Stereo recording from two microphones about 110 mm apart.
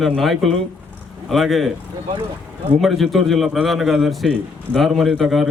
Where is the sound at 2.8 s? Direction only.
Centre (ahead or behind).